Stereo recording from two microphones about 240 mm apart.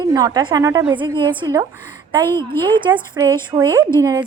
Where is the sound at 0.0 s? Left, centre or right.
Centre.